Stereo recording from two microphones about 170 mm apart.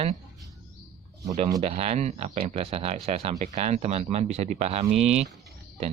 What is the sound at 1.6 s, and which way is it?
Speech, 35° right (ahead or behind).